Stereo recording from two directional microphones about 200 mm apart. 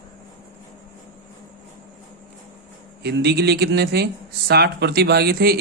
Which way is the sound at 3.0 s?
55° right (ahead or behind).